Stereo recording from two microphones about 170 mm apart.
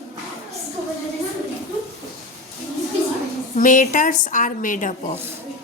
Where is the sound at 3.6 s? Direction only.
50° left (ahead or behind).